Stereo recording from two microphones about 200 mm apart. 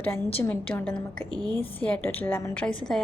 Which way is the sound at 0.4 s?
10° left (ahead or behind).